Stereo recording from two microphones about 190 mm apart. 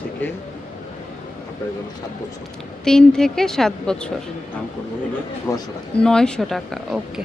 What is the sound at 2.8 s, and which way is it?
Speech, 5° left (ahead or behind).